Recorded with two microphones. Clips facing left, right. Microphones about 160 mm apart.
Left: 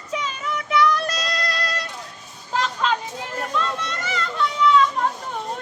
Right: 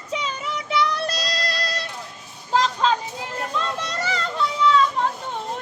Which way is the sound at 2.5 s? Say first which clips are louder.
Right 3 dB; 35° right (ahead or behind).